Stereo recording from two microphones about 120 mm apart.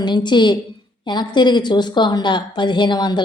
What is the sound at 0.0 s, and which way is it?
A woman's voice, 40° left (ahead or behind).